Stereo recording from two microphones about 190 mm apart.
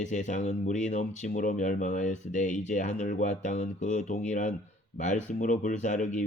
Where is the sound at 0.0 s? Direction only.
40° left (ahead or behind).